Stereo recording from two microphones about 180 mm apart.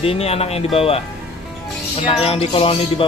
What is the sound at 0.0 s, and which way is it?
Music, 35° left (ahead or behind).